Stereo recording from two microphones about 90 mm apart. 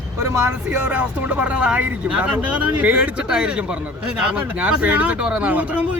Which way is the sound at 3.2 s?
10° right (ahead or behind).